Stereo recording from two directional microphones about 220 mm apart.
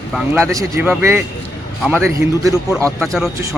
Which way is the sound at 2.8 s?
Centre (ahead or behind).